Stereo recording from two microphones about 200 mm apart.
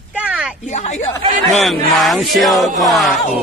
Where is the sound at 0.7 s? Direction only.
35° left (ahead or behind).